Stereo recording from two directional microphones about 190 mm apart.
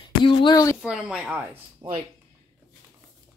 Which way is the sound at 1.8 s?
30° right (ahead or behind).